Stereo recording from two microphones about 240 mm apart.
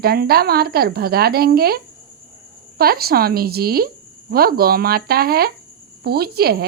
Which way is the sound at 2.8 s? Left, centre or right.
Right.